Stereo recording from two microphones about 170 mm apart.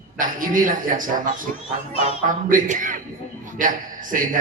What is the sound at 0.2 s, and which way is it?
A man's voice, 50° right (ahead or behind).